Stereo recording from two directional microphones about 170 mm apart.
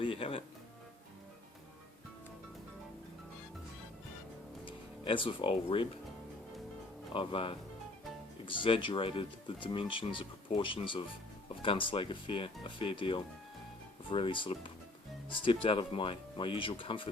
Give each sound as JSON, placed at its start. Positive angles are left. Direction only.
{"t": 0.0, "sound": "speech", "side_deg": 30}
{"t": 4.6, "sound": "speech", "side_deg": 30}
{"t": 7.1, "sound": "speech", "side_deg": 30}